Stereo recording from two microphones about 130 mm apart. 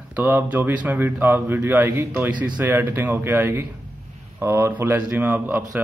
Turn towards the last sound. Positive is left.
turn(degrees=-15)  # may be behind; listen again after turning